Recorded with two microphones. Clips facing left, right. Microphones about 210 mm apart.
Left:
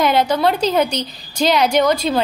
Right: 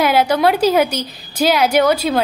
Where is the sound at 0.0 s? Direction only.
5° right (ahead or behind).